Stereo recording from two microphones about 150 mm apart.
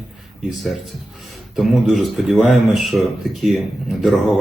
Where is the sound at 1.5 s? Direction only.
Centre (ahead or behind).